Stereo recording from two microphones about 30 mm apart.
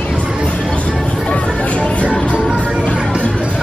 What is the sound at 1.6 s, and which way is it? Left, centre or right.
Speech, left.